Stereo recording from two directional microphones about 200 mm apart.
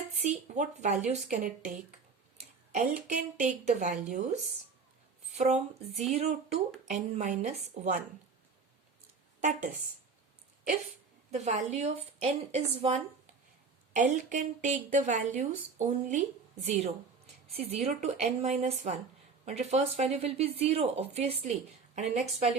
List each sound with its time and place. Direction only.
0.2 s a woman's voice: 35° right (ahead or behind)
5.9 s speech: centre (ahead or behind)
6.1 s a woman's voice: 30° right (ahead or behind)
9.4 s a woman's voice: 40° right (ahead or behind)
11.3 s a woman's voice: 35° right (ahead or behind)
14.1 s a woman's voice: 40° right (ahead or behind)